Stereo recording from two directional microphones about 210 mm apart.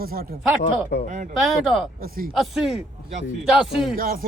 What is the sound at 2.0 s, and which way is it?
Speech, 45° right (ahead or behind).